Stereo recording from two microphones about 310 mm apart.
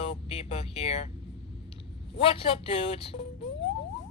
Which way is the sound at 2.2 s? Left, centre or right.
Centre.